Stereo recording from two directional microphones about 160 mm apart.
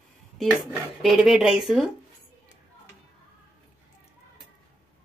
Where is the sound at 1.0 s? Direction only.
Centre (ahead or behind).